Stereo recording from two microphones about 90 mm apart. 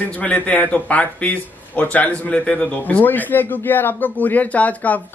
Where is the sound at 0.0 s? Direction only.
15° left (ahead or behind).